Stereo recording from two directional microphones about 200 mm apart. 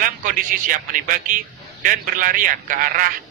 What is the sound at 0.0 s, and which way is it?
A man's voice, 45° right (ahead or behind).